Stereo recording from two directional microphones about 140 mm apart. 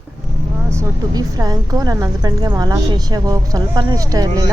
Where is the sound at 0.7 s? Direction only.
25° right (ahead or behind).